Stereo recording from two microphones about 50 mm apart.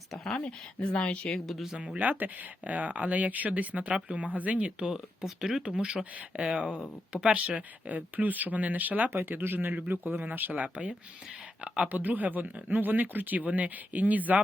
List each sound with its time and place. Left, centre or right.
0.1 s speech: centre
1.0 s speech: left
2.0 s speech: right
4.9 s speech: centre; by 9.0 s right
9.0 s speech: right; by 11.9 s centre
11.9 s speech: right